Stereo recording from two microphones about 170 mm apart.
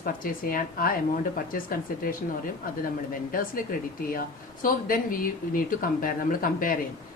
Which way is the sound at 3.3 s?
55° left (ahead or behind).